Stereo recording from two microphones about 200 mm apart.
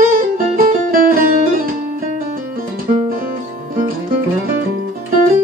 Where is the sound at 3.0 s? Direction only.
45° right (ahead or behind).